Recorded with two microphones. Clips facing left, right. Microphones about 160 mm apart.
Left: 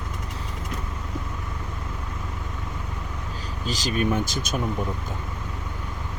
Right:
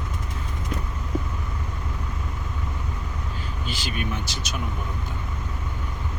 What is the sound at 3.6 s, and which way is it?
Speech, 40° left (ahead or behind).